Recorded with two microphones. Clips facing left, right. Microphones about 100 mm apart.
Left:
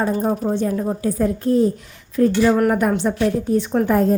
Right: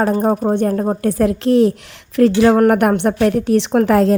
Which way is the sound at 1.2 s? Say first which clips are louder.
Right 4 dB; 85° right.